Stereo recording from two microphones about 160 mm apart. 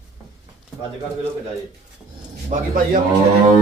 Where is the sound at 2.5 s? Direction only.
60° right (ahead or behind).